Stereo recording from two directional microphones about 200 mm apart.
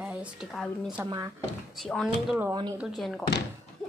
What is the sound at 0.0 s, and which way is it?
A woman's voice, 5° right (ahead or behind).